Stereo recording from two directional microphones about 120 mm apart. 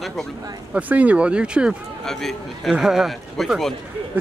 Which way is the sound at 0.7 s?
10° right (ahead or behind).